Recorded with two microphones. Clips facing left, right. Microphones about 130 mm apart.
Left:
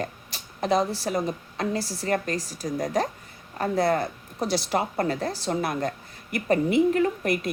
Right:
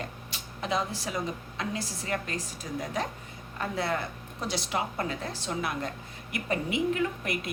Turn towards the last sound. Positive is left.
turn(degrees=40)  # may be behind; listen again after turning